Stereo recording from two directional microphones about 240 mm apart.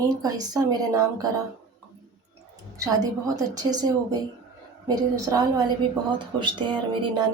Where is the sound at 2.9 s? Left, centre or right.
Centre.